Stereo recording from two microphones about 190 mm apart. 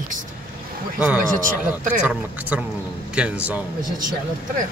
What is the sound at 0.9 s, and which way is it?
A man's voice, 5° right (ahead or behind).